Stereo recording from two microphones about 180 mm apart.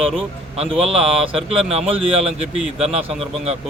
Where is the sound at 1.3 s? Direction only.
30° right (ahead or behind).